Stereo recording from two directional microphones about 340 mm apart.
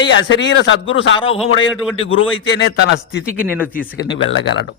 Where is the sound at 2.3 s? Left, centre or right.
Left.